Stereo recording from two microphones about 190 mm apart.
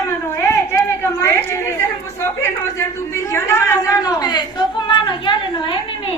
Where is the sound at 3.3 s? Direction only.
15° left (ahead or behind).